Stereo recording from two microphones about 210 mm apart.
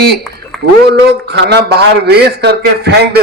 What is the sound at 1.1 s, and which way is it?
A man's voice, 50° right (ahead or behind).